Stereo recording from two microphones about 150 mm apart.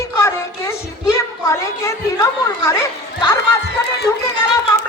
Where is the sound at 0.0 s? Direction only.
20° left (ahead or behind).